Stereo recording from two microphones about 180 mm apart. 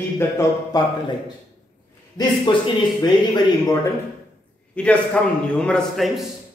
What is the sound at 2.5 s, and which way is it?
Speech, 25° left (ahead or behind).